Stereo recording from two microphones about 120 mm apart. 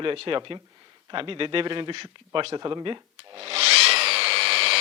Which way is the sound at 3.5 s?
60° right (ahead or behind).